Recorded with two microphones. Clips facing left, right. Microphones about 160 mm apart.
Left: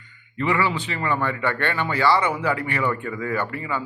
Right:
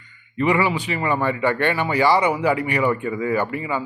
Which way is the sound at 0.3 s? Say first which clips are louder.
Right 3 dB; 15° right (ahead or behind).